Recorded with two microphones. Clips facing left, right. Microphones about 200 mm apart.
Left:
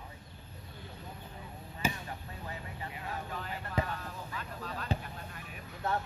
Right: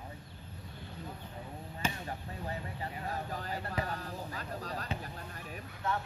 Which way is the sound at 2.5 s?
40° right (ahead or behind).